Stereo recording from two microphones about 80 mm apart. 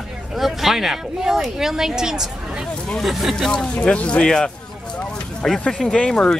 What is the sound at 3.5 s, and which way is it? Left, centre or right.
Speech, centre.